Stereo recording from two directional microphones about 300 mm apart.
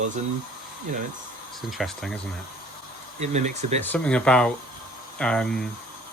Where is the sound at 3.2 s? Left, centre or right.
Right.